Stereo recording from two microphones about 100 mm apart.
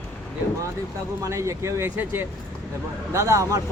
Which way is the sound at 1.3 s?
30° right (ahead or behind).